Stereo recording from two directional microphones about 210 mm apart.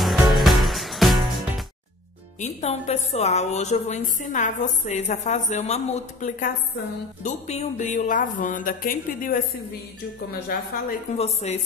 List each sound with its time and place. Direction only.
0.0 s music: centre (ahead or behind)
2.4 s a woman's voice: 30° left (ahead or behind)
11.1 s a woman's voice: 30° left (ahead or behind)